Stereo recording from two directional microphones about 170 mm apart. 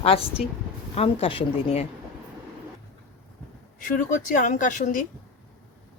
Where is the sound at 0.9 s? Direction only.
35° left (ahead or behind).